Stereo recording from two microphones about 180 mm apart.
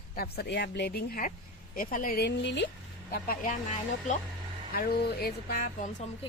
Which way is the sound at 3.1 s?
50° left (ahead or behind).